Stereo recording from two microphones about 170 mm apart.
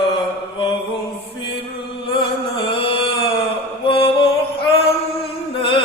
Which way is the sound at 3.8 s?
30° left (ahead or behind).